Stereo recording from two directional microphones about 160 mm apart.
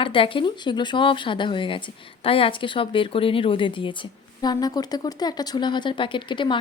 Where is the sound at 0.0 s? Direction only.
35° left (ahead or behind).